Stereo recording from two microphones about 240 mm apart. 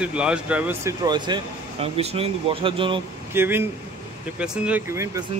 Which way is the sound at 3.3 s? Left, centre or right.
Centre.